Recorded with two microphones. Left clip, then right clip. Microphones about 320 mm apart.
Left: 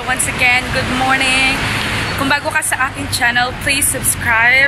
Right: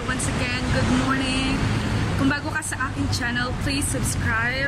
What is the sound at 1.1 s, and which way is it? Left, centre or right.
Speech, left.